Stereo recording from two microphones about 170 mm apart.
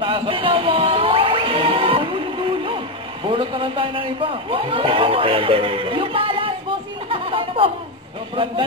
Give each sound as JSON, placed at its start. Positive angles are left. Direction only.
{"t": 0.0, "sound": "music", "side_deg": -30}
{"t": 3.3, "sound": "a man's voice", "side_deg": -30}
{"t": 7.1, "sound": "music", "side_deg": -30}